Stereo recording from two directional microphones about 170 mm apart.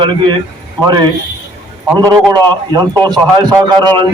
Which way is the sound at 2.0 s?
25° right (ahead or behind).